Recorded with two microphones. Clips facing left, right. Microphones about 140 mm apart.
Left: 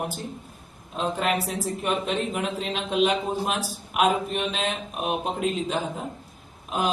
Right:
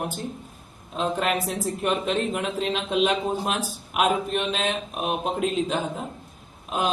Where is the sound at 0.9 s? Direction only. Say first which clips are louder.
Right 1 dB; centre (ahead or behind).